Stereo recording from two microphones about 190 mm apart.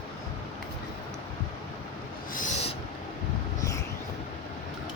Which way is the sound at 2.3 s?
40° left (ahead or behind).